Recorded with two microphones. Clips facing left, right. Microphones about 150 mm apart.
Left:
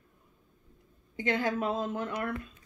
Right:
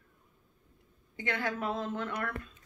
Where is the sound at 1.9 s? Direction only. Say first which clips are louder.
Left 2 dB; 30° left (ahead or behind).